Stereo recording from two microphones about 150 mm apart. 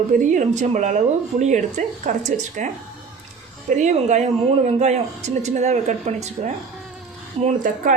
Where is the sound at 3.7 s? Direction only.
55° right (ahead or behind).